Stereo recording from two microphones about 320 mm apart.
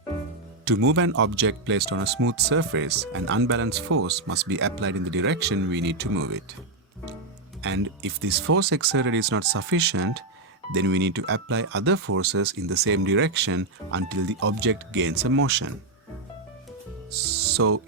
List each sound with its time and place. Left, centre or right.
0.6 s speech: right
7.6 s speech: right
17.5 s speech: right